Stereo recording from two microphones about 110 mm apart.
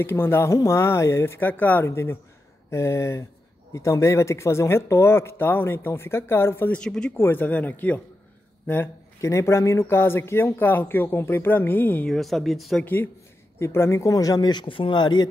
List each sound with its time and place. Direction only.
0.0 s speech: 20° left (ahead or behind)
6.8 s speech: 5° left (ahead or behind)
7.2 s speech: 20° left (ahead or behind)
12.1 s speech: centre (ahead or behind)
12.8 s speech: 15° left (ahead or behind); by 15.2 s 40° left (ahead or behind)